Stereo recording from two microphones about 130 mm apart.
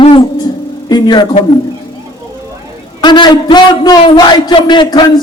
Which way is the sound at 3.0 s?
35° left (ahead or behind).